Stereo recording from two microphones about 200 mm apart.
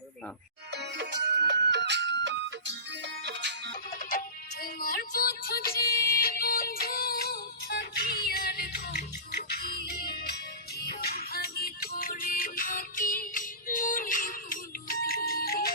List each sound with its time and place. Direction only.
0.7 s music: 55° right (ahead or behind)
4.6 s music: 45° left (ahead or behind)